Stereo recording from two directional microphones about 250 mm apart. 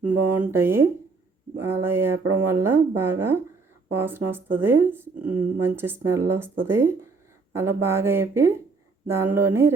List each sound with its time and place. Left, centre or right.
0.3 s speech: centre
2.1 s speech: right
2.5 s speech: centre